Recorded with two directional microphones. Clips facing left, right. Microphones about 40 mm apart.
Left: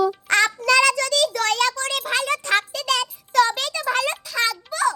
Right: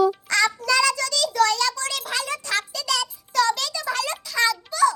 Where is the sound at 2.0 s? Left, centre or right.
Left.